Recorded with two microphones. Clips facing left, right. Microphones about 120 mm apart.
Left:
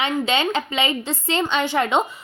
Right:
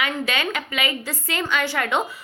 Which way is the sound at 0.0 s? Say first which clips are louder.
Left 4 dB; 25° left (ahead or behind).